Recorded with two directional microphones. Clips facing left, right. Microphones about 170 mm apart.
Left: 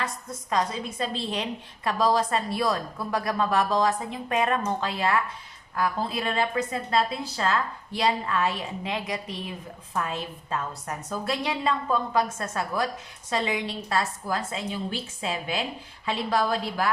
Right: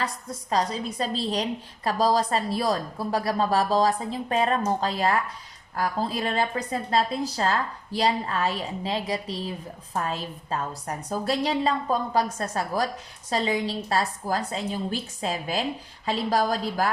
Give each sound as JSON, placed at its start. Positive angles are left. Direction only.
{"t": 0.5, "sound": "a woman's voice", "side_deg": -35}